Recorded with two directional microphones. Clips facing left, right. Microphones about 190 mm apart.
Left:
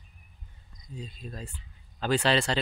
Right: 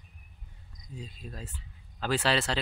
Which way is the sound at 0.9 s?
10° right (ahead or behind).